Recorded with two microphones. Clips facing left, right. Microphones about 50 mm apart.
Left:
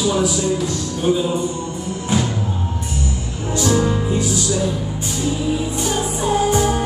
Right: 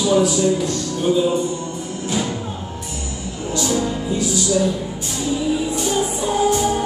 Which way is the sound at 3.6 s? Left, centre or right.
Left.